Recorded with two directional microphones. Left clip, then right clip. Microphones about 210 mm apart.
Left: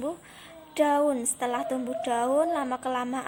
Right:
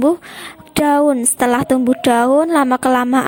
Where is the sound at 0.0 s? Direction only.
45° right (ahead or behind).